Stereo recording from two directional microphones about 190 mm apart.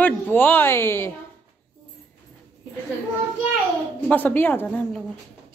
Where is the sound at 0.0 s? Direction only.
10° left (ahead or behind).